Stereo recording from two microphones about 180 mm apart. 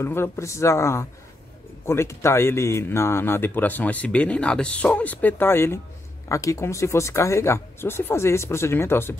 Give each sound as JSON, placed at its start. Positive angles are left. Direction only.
{"t": 0.0, "sound": "speech", "side_deg": 15}